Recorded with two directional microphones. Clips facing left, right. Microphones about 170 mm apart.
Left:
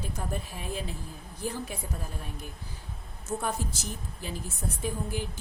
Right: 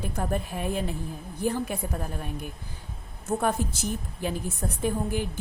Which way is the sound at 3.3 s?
55° right (ahead or behind).